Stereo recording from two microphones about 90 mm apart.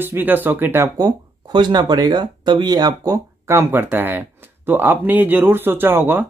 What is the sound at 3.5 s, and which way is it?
Speech, 30° right (ahead or behind).